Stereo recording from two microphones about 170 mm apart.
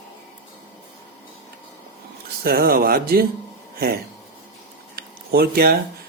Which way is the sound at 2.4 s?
60° right (ahead or behind).